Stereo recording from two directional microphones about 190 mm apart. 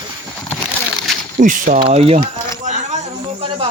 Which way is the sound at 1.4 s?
45° right (ahead or behind).